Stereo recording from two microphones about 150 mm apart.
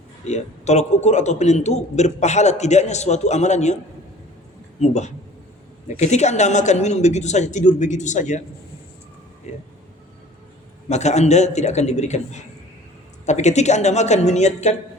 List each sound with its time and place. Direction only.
0.3 s a man's voice: 50° left (ahead or behind)
4.8 s a man's voice: 50° left (ahead or behind)
9.5 s a man's voice: 45° left (ahead or behind)
10.8 s a man's voice: 50° left (ahead or behind)